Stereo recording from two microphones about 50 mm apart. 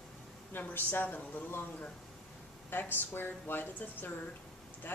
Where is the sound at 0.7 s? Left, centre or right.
Left.